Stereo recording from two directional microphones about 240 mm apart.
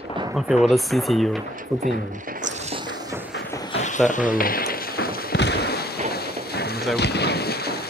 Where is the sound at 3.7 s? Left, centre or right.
Left.